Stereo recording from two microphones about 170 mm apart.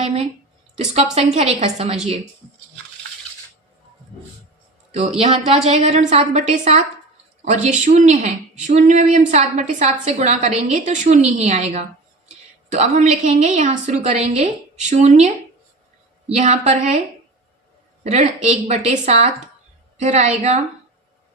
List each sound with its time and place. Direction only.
0.0 s a woman's voice: 35° right (ahead or behind)
4.9 s a woman's voice: 40° right (ahead or behind)
16.3 s a woman's voice: 40° right (ahead or behind)
18.0 s a woman's voice: 40° right (ahead or behind)